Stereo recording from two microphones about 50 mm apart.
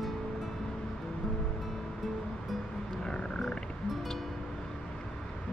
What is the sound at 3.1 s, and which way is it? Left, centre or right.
Music, centre.